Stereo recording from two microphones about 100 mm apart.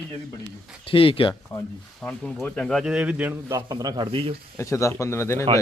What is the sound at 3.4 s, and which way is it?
Speech, 40° right (ahead or behind).